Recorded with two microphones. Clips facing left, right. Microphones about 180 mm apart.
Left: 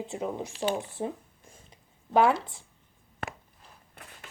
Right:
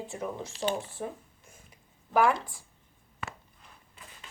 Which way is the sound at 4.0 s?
60° left (ahead or behind).